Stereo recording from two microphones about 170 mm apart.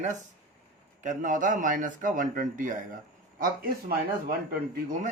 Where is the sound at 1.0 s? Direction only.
50° right (ahead or behind).